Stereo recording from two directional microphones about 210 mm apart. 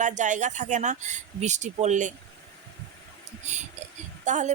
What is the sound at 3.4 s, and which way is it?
A woman's voice, 35° right (ahead or behind).